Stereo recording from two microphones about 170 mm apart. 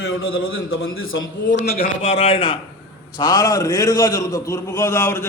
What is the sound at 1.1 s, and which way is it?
Speech, 90° left.